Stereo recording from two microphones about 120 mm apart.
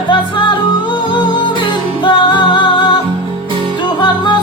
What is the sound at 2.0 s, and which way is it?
Music, 40° left (ahead or behind).